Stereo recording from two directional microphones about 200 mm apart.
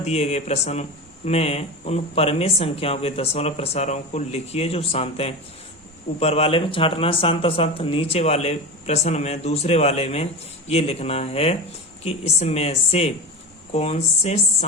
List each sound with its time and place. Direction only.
0.0 s speech: 35° left (ahead or behind)